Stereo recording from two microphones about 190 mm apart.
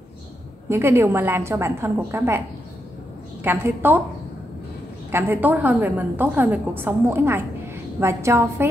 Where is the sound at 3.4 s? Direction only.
10° right (ahead or behind).